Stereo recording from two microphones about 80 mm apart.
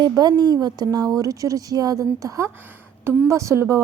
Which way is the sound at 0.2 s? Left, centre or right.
Right.